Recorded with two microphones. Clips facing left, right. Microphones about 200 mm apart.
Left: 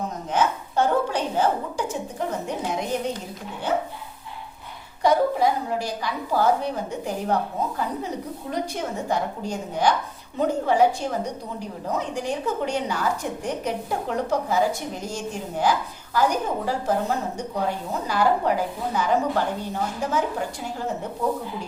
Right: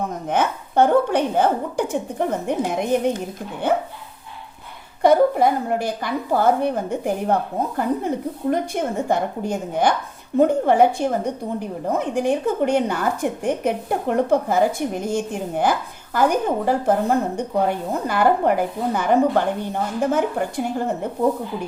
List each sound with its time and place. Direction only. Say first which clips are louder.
0.3 s a woman's voice: right 1 dB; 55° right (ahead or behind)
5.0 s a woman's voice: right 5 dB; 55° right (ahead or behind)